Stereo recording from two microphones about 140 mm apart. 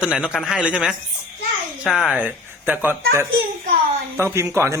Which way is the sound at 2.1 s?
10° right (ahead or behind).